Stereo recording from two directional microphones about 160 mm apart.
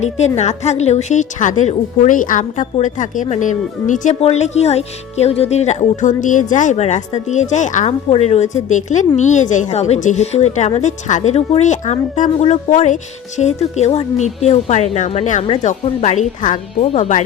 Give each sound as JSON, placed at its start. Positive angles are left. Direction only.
{"t": 0.3, "sound": "speech", "side_deg": 45}